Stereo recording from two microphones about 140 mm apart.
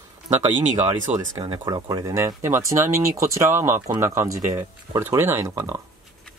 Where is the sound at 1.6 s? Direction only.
30° right (ahead or behind).